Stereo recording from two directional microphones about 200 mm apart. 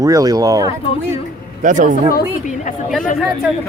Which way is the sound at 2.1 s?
40° left (ahead or behind).